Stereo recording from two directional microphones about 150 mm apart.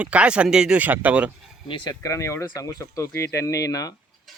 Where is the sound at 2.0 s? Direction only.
20° left (ahead or behind).